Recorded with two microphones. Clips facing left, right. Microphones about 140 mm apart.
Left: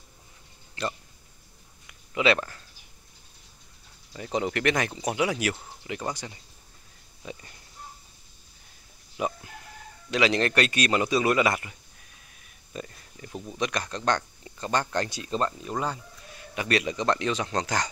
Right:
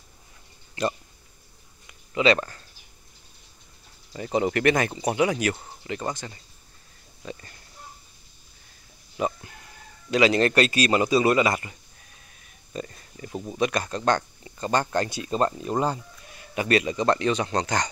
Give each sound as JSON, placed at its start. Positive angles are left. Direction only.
{"t": 0.8, "sound": "a sound", "side_deg": -15}
{"t": 2.1, "sound": "speech", "side_deg": 5}
{"t": 4.1, "sound": "speech", "side_deg": -5}
{"t": 9.1, "sound": "speech", "side_deg": 0}
{"t": 12.7, "sound": "speech", "side_deg": 0}
{"t": 15.4, "sound": "speech", "side_deg": -35}
{"t": 16.5, "sound": "speech", "side_deg": 0}